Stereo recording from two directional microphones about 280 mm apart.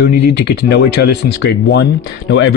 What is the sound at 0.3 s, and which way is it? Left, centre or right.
Speech, left.